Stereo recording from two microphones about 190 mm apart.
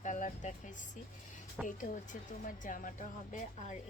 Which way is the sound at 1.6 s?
45° left (ahead or behind).